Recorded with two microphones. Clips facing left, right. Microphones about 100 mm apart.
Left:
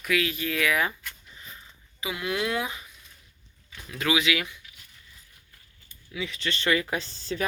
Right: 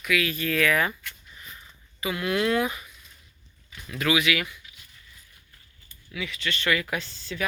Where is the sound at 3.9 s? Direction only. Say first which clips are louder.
Right 1 dB; 25° left (ahead or behind).